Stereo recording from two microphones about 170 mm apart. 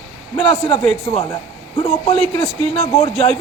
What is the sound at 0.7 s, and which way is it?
Speech, 30° left (ahead or behind).